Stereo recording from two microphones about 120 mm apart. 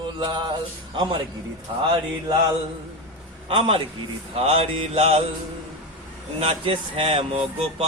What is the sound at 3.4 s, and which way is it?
Speech, 50° right (ahead or behind).